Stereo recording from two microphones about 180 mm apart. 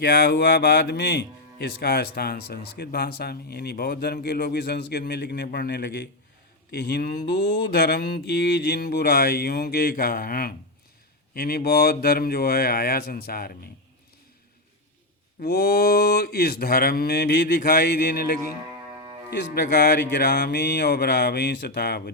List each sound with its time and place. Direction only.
0.3 s speech: 60° left (ahead or behind)
15.4 s speech: 60° left (ahead or behind)
20.1 s speech: 75° left (ahead or behind)